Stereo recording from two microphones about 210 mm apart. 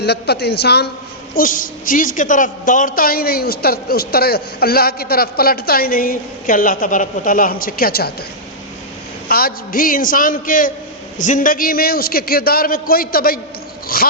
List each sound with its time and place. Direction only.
0.0 s a woman's voice: 50° left (ahead or behind)
1.3 s a woman's voice: 40° left (ahead or behind)
9.3 s a man's voice: 45° left (ahead or behind)